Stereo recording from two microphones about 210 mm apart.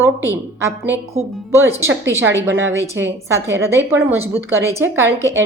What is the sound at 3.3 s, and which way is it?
A woman's voice, 15° right (ahead or behind).